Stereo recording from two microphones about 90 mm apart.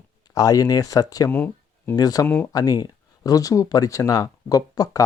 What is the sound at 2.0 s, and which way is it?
Speech, 45° left (ahead or behind).